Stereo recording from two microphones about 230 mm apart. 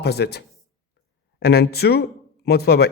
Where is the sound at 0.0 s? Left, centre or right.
Left.